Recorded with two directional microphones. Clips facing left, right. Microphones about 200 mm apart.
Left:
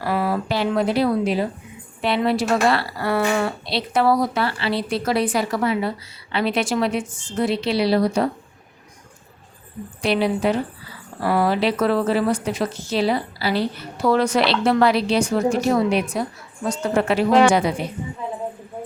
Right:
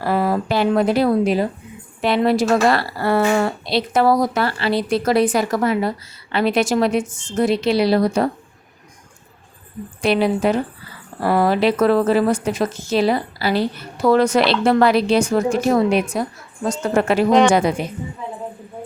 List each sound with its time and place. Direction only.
0.0 s a sound: 40° right (ahead or behind)
2.0 s speech: 45° right (ahead or behind)
10.0 s speech: 50° right (ahead or behind)